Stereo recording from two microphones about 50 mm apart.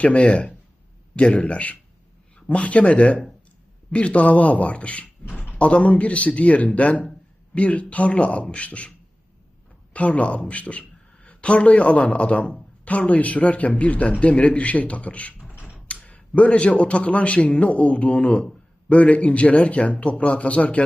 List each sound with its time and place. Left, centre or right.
0.0 s a man's voice: left
9.9 s a man's voice: left
15.4 s a sound: right
15.9 s a man's voice: left